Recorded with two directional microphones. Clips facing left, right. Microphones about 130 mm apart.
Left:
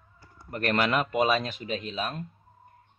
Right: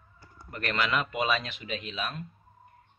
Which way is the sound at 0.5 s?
40° left (ahead or behind).